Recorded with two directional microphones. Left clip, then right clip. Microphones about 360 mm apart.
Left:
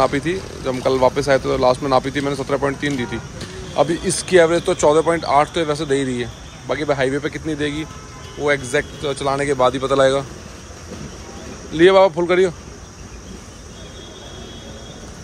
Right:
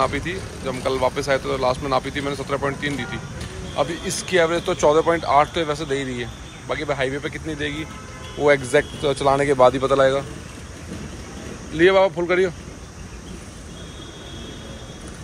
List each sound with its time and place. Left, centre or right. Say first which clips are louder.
0.3 s speech: left 5 dB; centre
11.7 s speech: left 4 dB; centre